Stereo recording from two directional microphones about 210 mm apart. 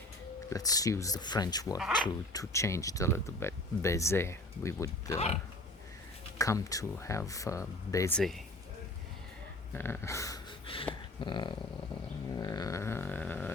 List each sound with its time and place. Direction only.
0.5 s speech: 15° left (ahead or behind)
6.4 s speech: 15° left (ahead or behind)
9.7 s speech: 10° left (ahead or behind)
11.2 s dog: 20° left (ahead or behind)
12.3 s a sound: 20° left (ahead or behind)